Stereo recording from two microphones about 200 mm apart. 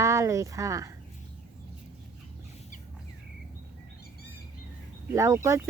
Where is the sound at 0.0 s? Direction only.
15° right (ahead or behind).